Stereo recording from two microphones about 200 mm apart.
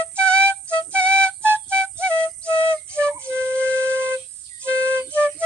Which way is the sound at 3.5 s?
5° left (ahead or behind).